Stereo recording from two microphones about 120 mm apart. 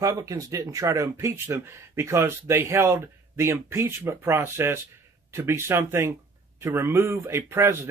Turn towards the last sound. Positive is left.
turn(degrees=-20)  # may be behind; listen again after turning